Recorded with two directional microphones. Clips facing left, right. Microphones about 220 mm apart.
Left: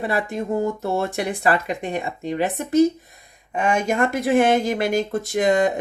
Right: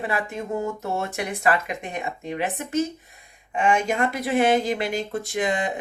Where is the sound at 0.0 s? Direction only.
35° left (ahead or behind).